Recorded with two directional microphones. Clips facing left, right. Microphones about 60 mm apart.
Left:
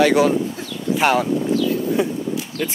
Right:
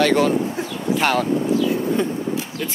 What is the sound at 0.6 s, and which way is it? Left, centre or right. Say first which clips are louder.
Bird: right 4 dB; right.